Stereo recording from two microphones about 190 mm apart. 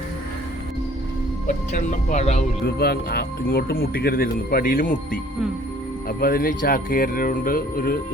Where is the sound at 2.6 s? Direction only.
55° left (ahead or behind).